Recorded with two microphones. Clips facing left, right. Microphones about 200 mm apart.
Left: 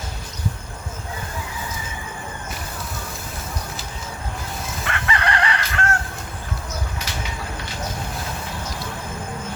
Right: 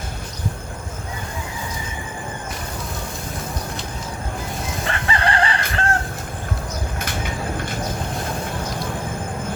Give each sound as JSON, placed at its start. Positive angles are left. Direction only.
{"t": 4.9, "sound": "chicken", "side_deg": -30}